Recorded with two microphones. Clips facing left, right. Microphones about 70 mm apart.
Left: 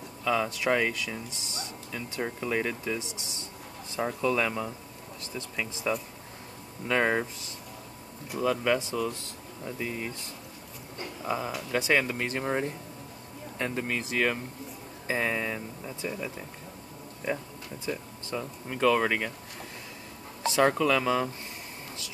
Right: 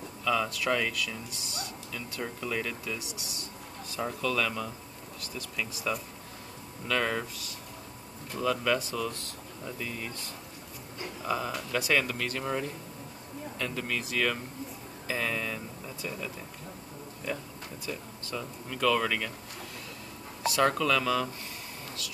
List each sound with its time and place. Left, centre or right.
0.2 s speech: left
8.3 s speech: left
11.2 s speech: centre
18.3 s speech: left
20.4 s speech: left